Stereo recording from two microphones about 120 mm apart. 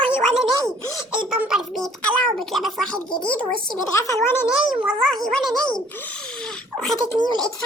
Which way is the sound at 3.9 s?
25° left (ahead or behind).